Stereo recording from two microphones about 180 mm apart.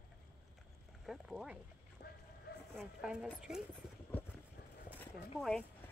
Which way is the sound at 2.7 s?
Centre (ahead or behind).